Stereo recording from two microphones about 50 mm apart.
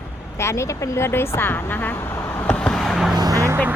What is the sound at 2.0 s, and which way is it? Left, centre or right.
Vehicle, left.